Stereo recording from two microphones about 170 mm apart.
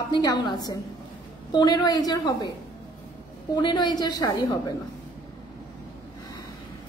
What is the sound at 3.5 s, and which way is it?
Speech, 25° left (ahead or behind).